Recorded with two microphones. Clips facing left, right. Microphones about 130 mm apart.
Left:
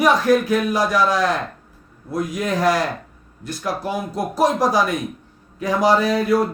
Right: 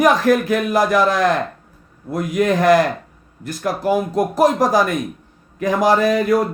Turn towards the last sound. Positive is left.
turn(degrees=-50)  # may be behind; listen again after turning